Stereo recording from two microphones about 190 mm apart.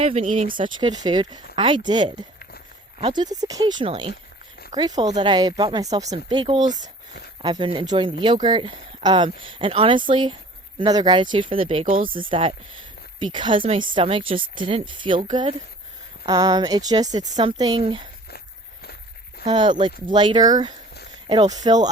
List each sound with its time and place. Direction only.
0.0 s speech: 30° right (ahead or behind)
11.9 s speech: 45° right (ahead or behind)
12.3 s speech: 30° right (ahead or behind)
19.5 s speech: 25° right (ahead or behind)